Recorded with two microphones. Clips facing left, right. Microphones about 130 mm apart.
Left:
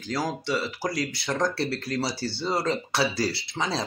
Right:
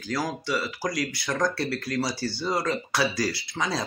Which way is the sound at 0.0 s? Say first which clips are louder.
Even; 25° left (ahead or behind).